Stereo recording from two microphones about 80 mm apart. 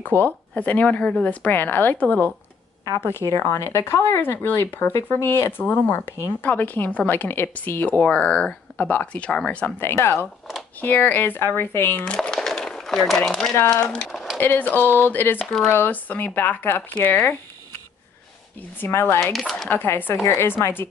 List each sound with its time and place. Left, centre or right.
0.1 s speech: left
9.8 s speech: left
10.8 s speech: left
12.0 s a sound: centre
13.7 s speech: centre
14.4 s speech: left
18.8 s speech: left